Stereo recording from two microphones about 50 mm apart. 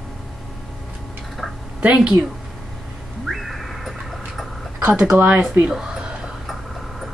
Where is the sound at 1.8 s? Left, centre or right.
Right.